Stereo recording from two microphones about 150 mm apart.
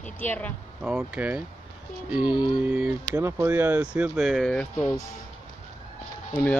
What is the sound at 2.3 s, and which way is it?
Mantra, 30° left (ahead or behind).